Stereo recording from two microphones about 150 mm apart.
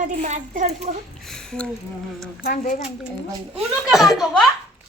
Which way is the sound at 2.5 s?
80° left.